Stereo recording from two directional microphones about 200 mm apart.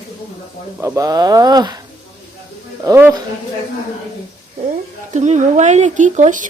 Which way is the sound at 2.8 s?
15° right (ahead or behind).